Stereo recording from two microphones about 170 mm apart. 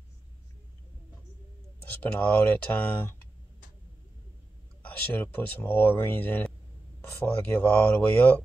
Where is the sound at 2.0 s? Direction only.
10° left (ahead or behind).